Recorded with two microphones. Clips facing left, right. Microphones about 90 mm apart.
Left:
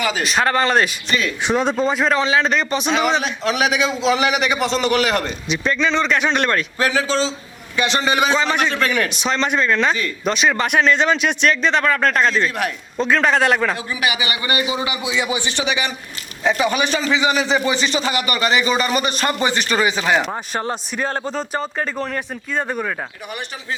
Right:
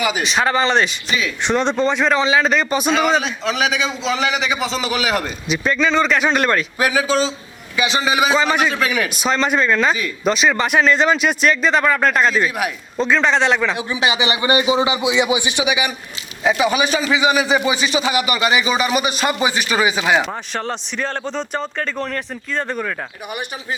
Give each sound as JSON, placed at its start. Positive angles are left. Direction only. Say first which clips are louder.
{"t": 0.2, "sound": "speech", "louder": "left 2 dB", "side_deg": 0}
{"t": 13.7, "sound": "a man's voice", "louder": "right 3 dB", "side_deg": -20}